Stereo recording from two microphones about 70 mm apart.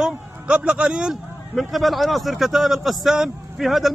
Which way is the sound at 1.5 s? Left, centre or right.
Centre.